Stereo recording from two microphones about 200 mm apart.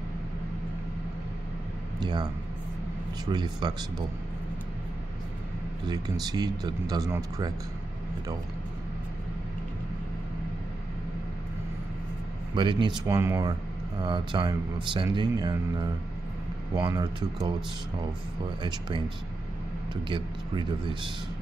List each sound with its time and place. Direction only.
2.0 s a man's voice: 20° right (ahead or behind)
5.9 s speech: 20° right (ahead or behind)
12.5 s speech: 25° right (ahead or behind)
18.6 s speech: 25° right (ahead or behind)
20.1 s speech: 25° right (ahead or behind)